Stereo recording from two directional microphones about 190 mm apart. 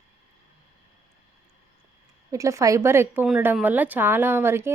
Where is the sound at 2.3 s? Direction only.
15° right (ahead or behind).